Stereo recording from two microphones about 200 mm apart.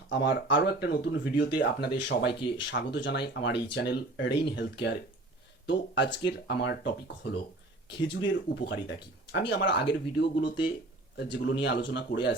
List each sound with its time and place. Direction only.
0.1 s speech: 60° left (ahead or behind)